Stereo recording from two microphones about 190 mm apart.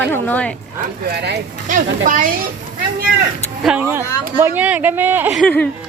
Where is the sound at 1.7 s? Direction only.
45° right (ahead or behind).